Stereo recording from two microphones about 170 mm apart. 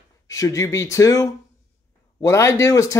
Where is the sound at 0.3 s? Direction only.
20° left (ahead or behind).